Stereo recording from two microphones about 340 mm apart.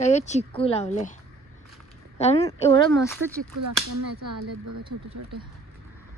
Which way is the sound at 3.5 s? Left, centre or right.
Right.